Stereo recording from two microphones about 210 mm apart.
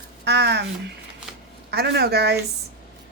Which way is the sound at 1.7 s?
50° right (ahead or behind).